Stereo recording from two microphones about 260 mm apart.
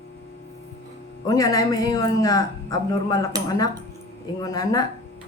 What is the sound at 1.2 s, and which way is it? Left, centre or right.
Speech, centre.